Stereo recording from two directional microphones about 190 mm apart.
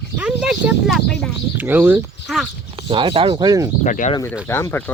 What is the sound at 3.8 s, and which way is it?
Speech, 40° left (ahead or behind).